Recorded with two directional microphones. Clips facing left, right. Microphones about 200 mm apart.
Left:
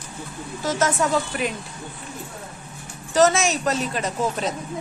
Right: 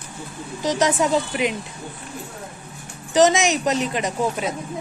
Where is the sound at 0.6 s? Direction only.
15° right (ahead or behind).